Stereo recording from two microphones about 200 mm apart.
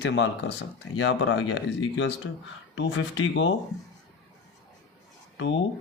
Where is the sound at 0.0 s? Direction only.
65° left (ahead or behind).